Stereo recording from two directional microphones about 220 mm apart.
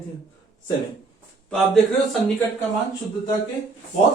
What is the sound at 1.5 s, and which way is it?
Speech, centre (ahead or behind).